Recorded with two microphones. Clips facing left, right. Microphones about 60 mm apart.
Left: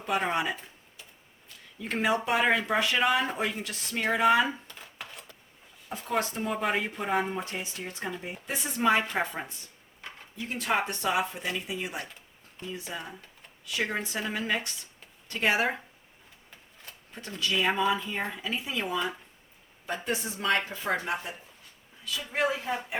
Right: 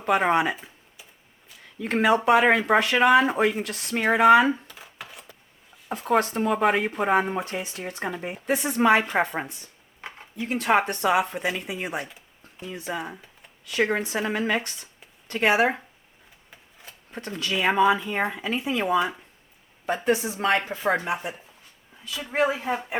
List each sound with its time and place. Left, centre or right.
0.2 s speech: right
1.8 s speech: right
4.7 s a sound: centre
5.9 s speech: right
10.0 s a sound: right
10.5 s speech: right
13.7 s speech: right
17.1 s speech: right
17.7 s speech: right
20.1 s speech: right
20.5 s speech: centre
20.8 s speech: right
21.1 s speech: centre